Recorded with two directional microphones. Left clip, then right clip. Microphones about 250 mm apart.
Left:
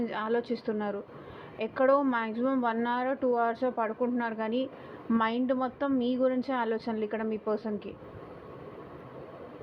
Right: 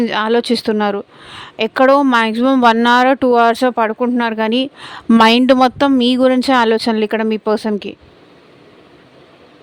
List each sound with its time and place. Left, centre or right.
0.0 s speech: right